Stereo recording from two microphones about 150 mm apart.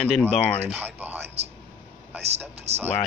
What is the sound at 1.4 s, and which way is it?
Speech, 45° right (ahead or behind).